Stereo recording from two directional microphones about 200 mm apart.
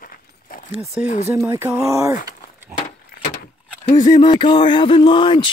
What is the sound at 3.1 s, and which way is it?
Vehicle, 50° left (ahead or behind).